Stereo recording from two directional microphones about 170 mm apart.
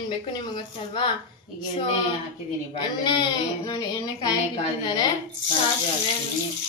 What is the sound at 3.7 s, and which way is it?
Speech, 20° left (ahead or behind).